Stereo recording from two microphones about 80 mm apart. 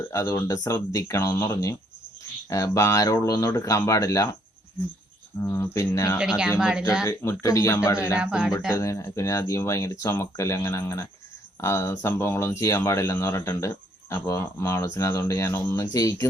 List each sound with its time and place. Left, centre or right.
0.1 s speech: left
5.4 s speech: left
6.1 s speech: centre
7.0 s speech: left
8.2 s speech: centre
8.7 s speech: left